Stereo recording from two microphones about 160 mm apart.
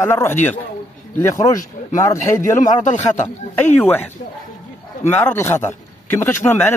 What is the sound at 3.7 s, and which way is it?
Speech, 10° left (ahead or behind).